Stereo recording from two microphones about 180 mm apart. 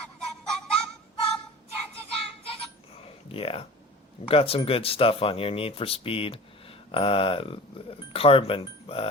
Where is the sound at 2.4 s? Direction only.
30° left (ahead or behind).